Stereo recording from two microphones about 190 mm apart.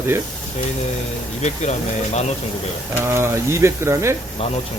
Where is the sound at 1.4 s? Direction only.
35° left (ahead or behind).